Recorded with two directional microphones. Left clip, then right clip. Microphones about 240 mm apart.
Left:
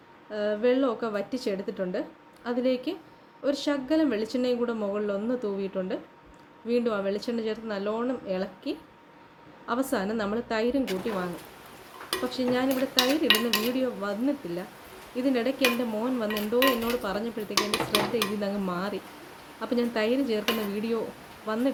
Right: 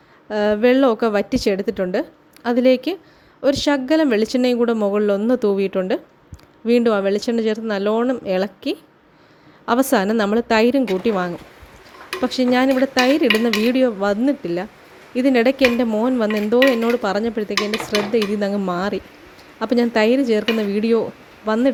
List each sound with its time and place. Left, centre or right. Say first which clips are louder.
0.3 s speech: right 9 dB; right
12.3 s speech: right 11 dB; right